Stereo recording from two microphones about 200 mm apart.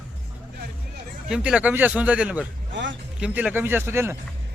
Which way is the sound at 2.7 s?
65° right (ahead or behind).